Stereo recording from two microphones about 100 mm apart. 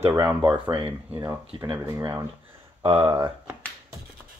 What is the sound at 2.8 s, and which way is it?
Speech, 55° right (ahead or behind).